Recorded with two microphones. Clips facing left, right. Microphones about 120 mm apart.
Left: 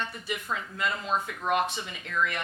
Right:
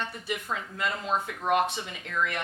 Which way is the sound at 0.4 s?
35° right (ahead or behind).